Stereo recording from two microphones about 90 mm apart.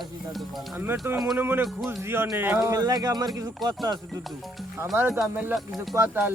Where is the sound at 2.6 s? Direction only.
40° right (ahead or behind).